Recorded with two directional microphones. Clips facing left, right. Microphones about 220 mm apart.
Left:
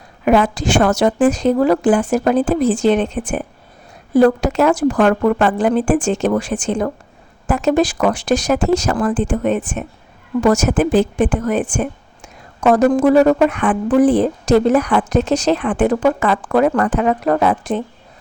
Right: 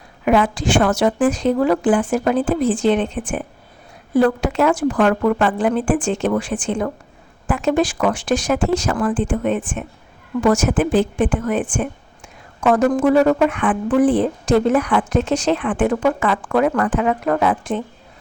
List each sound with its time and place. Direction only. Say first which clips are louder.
0.3 s speech: left 2 dB; 40° left (ahead or behind)